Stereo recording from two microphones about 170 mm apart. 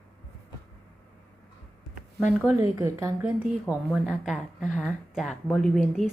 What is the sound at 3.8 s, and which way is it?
A woman's voice, 5° left (ahead or behind).